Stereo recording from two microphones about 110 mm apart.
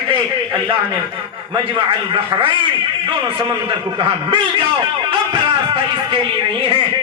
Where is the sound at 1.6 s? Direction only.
50° right (ahead or behind).